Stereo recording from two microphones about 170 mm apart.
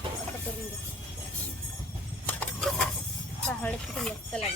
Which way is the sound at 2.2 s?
5° left (ahead or behind).